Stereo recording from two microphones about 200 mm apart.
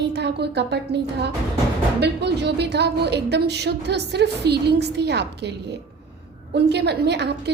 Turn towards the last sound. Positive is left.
turn(degrees=-55)  # may be behind; listen again after turning